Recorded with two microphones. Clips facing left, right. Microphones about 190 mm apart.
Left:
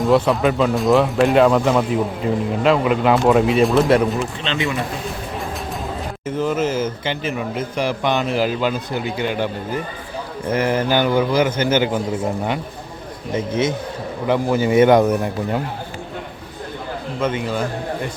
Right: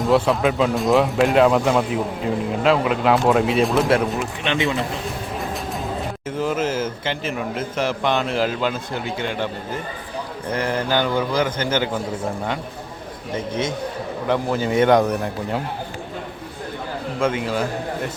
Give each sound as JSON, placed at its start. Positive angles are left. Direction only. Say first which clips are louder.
{"t": 0.0, "sound": "speech", "louder": "left 2 dB", "side_deg": 0}
{"t": 4.4, "sound": "speech", "louder": "right 4 dB", "side_deg": -20}
{"t": 6.2, "sound": "speech", "louder": "left 3 dB", "side_deg": -5}
{"t": 10.5, "sound": "a man's voice", "louder": "left 4 dB", "side_deg": 10}
{"t": 13.3, "sound": "speech", "louder": "left 4 dB", "side_deg": 5}
{"t": 17.2, "sound": "a man's voice", "louder": "even", "side_deg": -10}